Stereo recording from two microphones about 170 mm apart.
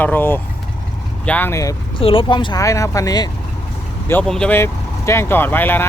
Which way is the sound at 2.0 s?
30° left (ahead or behind).